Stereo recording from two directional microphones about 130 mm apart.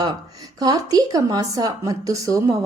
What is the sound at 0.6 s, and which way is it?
A woman's voice, 30° right (ahead or behind).